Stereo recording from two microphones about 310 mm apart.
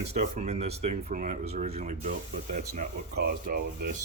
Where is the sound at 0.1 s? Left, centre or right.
Right.